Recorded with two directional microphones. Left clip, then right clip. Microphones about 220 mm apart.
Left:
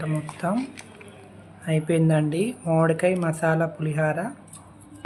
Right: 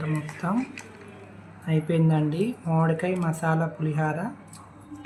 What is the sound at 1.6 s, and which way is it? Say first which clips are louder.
Speech: left 3 dB; 20° left (ahead or behind).